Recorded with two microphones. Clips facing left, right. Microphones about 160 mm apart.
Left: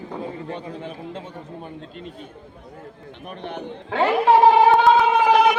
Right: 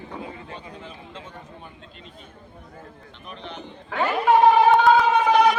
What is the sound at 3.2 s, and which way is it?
Speech, 55° left (ahead or behind).